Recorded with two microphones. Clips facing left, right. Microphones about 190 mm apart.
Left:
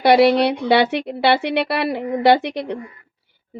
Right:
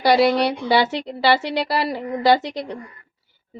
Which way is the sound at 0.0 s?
60° left (ahead or behind).